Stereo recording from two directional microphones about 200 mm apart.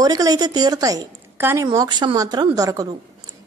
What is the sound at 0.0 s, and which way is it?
A woman's voice, 20° right (ahead or behind).